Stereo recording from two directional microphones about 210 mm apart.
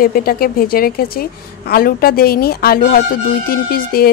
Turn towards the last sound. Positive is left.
turn(degrees=45)  # may be behind; listen again after turning